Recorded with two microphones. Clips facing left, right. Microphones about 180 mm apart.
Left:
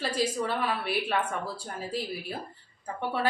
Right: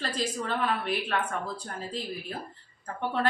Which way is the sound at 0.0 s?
10° left (ahead or behind).